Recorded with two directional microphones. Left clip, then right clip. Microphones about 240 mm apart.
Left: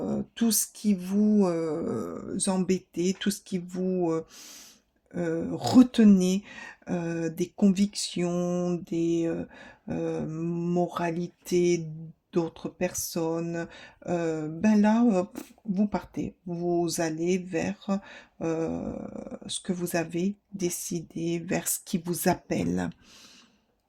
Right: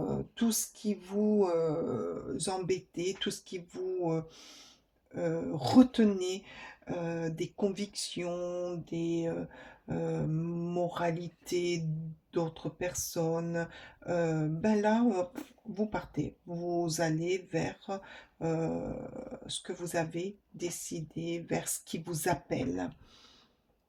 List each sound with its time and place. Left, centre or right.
0.1 s speech: left